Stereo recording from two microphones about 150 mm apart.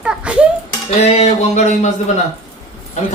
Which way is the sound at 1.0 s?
45° left (ahead or behind).